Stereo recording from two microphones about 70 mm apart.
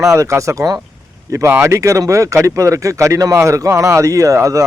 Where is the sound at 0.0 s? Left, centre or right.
Right.